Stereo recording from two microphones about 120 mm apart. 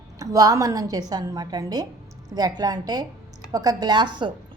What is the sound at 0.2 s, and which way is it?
A woman's voice, 30° right (ahead or behind).